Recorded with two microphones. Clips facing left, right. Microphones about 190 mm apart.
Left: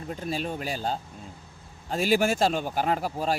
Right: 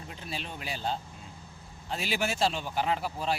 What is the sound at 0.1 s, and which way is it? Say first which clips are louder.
A man's voice: left 10 dB; 45° left (ahead or behind).